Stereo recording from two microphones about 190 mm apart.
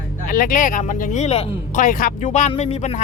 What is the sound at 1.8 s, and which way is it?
Speech, 45° left (ahead or behind).